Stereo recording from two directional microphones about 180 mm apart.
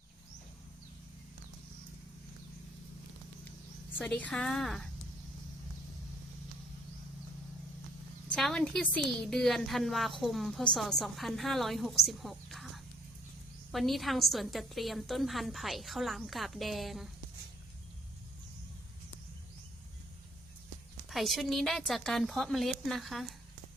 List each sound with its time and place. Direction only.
3.9 s a woman's voice: 10° left (ahead or behind)
8.3 s a woman's voice: 5° left (ahead or behind)
21.1 s a woman's voice: centre (ahead or behind)